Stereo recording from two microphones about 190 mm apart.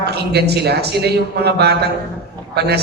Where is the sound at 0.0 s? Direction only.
60° right (ahead or behind).